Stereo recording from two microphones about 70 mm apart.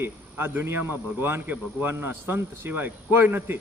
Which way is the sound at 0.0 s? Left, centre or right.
Right.